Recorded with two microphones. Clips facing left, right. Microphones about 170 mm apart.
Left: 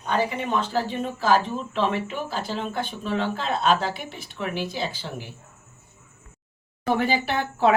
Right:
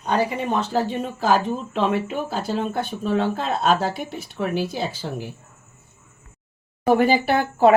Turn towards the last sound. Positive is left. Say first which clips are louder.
# right 5 dB
turn(degrees=-45)  # may be behind; listen again after turning